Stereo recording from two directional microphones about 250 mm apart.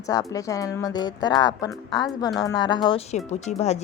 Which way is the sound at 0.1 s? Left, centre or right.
Centre.